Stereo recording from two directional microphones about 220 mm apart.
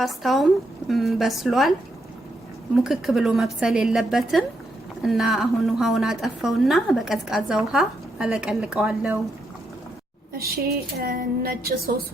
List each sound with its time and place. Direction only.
0.0 s a woman's voice: centre (ahead or behind)
2.7 s a woman's voice: centre (ahead or behind)
10.3 s a woman's voice: 45° right (ahead or behind)